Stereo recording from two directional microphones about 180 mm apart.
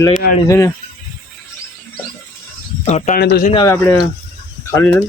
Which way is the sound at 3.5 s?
20° left (ahead or behind).